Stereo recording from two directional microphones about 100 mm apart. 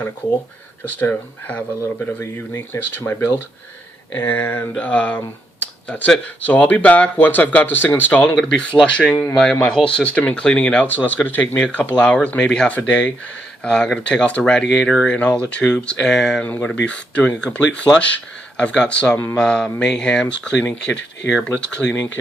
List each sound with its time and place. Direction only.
0.9 s speech: 15° left (ahead or behind)